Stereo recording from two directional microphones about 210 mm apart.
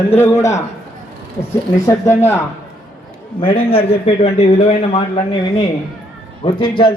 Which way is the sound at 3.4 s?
25° left (ahead or behind).